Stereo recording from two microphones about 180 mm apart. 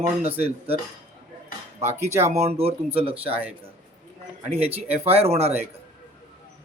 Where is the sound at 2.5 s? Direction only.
35° right (ahead or behind).